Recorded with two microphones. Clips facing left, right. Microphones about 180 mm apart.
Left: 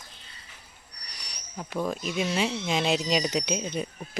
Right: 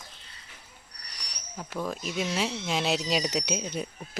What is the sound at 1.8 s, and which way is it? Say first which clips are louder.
Speech: left 2 dB; centre (ahead or behind).